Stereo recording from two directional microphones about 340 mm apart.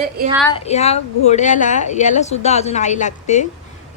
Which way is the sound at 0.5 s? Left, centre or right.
Centre.